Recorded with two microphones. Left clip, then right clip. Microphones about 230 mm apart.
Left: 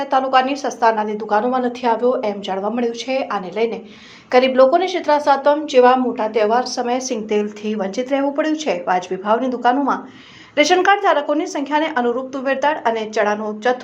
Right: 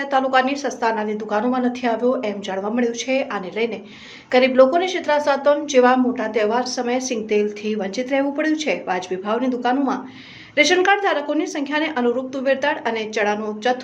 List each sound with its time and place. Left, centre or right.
0.1 s a woman's voice: centre